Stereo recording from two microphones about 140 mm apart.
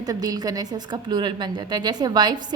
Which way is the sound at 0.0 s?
25° right (ahead or behind).